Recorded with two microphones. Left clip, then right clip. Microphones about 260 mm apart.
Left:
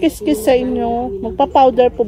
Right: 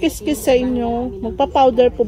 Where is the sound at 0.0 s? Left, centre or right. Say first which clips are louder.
Left 3 dB; left.